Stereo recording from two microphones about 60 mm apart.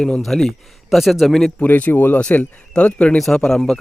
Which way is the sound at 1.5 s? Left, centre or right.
Left.